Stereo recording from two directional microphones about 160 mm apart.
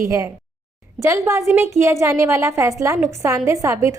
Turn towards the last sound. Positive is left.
turn(degrees=-20)  # may be behind; listen again after turning